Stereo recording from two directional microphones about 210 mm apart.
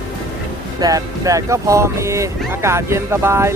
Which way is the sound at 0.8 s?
15° right (ahead or behind).